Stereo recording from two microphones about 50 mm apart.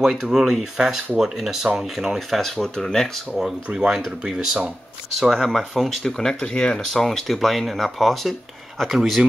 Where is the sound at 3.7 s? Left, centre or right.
Centre.